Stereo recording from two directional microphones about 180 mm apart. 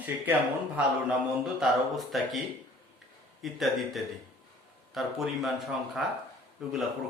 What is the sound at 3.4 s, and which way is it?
Speech, centre (ahead or behind).